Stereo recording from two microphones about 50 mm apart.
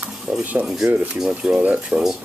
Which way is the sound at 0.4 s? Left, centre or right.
Right.